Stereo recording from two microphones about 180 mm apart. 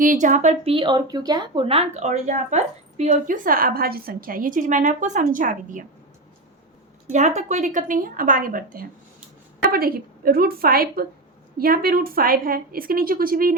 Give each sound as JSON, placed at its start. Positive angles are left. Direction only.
{"t": 0.0, "sound": "speech", "side_deg": -45}
{"t": 7.1, "sound": "a woman's voice", "side_deg": -40}